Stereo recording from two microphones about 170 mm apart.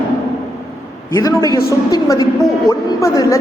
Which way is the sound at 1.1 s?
20° left (ahead or behind).